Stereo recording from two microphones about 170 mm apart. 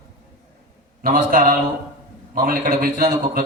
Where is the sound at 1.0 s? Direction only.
55° right (ahead or behind).